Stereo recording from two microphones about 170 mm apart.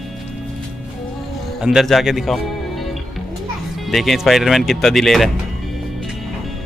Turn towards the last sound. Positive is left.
turn(degrees=0)  # may be behind; listen again after turning